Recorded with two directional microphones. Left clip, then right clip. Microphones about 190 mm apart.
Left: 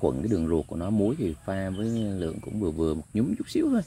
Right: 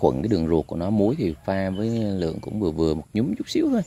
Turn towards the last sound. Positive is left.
turn(degrees=-10)  # may be behind; listen again after turning